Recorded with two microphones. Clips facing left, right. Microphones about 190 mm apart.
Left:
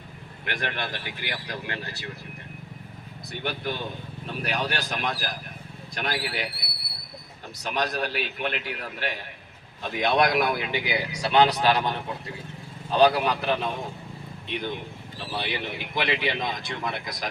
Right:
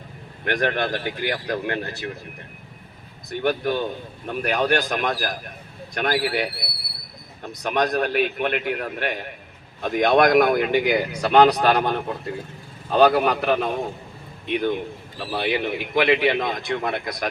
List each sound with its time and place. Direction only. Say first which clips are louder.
0.4 s speech: right 9 dB; 50° right (ahead or behind)
3.4 s speech: right 9 dB; 55° right (ahead or behind)
7.6 s speech: right 6 dB; 55° right (ahead or behind)